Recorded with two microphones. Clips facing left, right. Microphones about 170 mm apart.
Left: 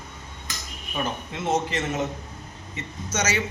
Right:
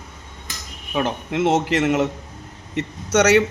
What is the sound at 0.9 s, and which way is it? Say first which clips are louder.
A man's voice: right 7 dB; 85° right.